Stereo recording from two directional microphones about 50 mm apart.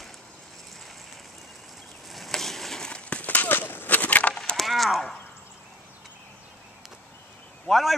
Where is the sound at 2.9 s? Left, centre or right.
Left.